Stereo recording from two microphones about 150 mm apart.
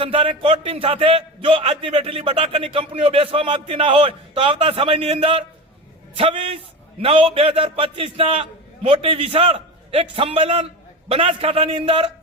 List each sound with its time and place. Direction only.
0.0 s a man's voice: 40° right (ahead or behind)